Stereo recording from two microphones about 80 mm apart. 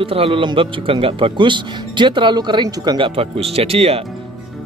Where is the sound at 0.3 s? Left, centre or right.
Right.